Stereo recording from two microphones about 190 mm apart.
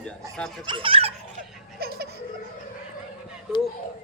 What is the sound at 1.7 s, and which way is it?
Snicker, 55° right (ahead or behind).